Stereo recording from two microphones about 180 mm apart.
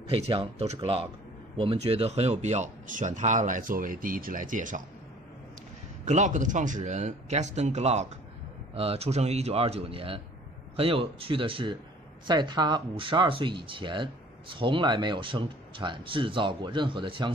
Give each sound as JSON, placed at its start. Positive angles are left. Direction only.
{"t": 0.1, "sound": "speech", "side_deg": -30}
{"t": 6.0, "sound": "speech", "side_deg": -40}